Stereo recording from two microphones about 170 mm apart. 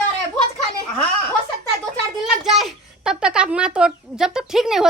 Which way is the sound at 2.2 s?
Centre (ahead or behind).